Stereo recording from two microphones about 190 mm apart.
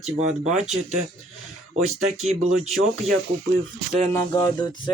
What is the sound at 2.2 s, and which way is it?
Speech, 35° right (ahead or behind).